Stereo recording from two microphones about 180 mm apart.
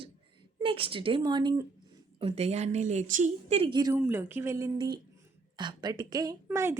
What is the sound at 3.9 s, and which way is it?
A woman's voice, 15° right (ahead or behind).